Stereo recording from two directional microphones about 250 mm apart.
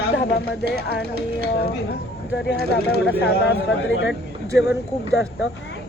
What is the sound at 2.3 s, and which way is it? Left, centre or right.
Speech, left.